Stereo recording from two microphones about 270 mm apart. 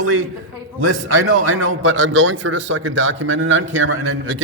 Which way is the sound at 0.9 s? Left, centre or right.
Right.